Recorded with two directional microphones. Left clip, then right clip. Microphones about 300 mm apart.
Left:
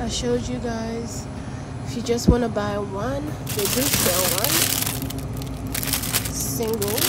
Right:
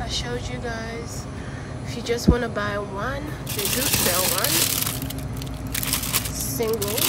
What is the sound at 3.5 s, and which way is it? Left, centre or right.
Speech, centre.